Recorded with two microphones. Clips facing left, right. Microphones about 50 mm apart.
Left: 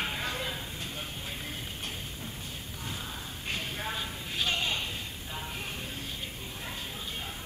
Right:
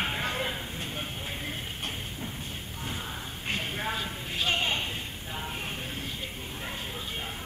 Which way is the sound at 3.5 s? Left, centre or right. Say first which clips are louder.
Right 4 dB; right.